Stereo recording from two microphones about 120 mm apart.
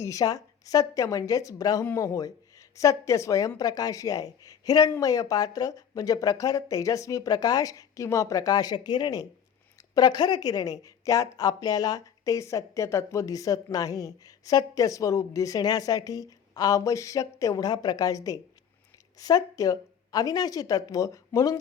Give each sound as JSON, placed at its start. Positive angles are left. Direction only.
{"t": 0.0, "sound": "speech", "side_deg": 30}